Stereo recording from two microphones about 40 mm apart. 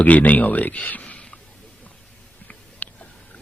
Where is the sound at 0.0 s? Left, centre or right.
Left.